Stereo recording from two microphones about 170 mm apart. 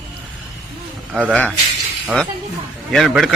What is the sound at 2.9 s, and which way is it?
Speech, centre (ahead or behind).